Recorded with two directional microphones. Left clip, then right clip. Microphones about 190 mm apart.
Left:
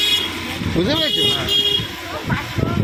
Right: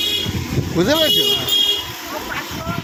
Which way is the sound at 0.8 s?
10° right (ahead or behind).